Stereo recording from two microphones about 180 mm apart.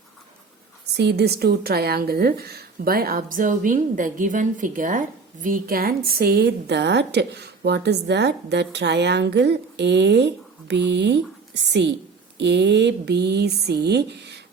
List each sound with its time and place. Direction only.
0.9 s a woman's voice: 65° right (ahead or behind)